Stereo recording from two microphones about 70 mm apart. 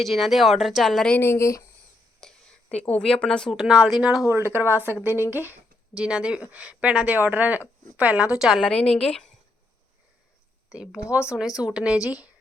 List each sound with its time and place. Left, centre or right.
0.0 s speech: centre
1.2 s speech: left
2.2 s speech: centre
3.5 s speech: centre
4.0 s speech: centre
4.3 s speech: right
5.0 s a woman's voice: left
5.3 s speech: right
5.9 s speech: centre
8.7 s a woman's voice: centre
10.7 s speech: centre